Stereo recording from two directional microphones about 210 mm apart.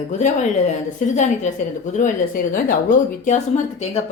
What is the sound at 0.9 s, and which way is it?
A woman's voice, 35° left (ahead or behind).